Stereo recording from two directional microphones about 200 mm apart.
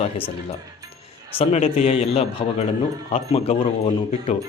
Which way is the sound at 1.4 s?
30° left (ahead or behind).